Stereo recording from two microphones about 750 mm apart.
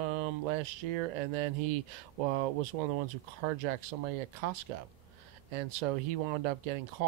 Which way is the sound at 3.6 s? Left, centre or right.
Right.